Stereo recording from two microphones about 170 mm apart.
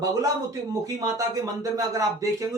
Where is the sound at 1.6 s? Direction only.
20° right (ahead or behind).